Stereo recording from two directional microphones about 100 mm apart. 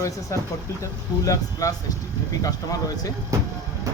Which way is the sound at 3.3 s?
30° right (ahead or behind).